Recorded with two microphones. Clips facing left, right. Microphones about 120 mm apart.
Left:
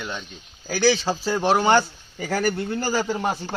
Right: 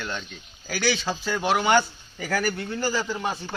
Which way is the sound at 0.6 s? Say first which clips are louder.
Left 6 dB; 30° left (ahead or behind).